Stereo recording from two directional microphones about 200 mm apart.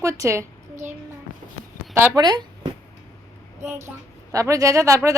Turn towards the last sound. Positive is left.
turn(degrees=-15)  # may be behind; listen again after turning